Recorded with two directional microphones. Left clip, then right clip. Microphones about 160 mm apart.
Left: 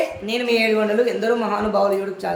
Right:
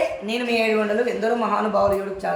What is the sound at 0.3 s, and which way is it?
Speech, 30° left (ahead or behind).